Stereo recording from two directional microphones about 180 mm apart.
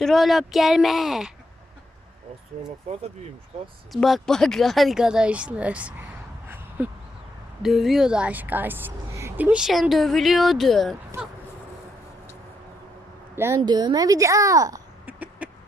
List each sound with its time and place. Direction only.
0.0 s a woman's voice: centre (ahead or behind)
2.9 s speech: 35° right (ahead or behind)
3.9 s a woman's voice: centre (ahead or behind)
6.8 s a sound: 10° right (ahead or behind)
7.6 s a woman's voice: centre (ahead or behind)
11.1 s speech: 15° right (ahead or behind)
13.3 s a woman's voice: 15° right (ahead or behind)
15.0 s a sound: 10° right (ahead or behind)